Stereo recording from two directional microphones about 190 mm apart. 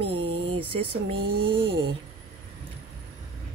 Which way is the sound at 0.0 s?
30° right (ahead or behind).